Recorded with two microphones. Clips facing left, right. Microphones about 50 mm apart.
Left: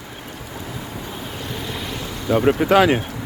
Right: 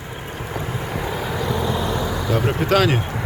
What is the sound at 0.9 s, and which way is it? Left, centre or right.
Vehicle, right.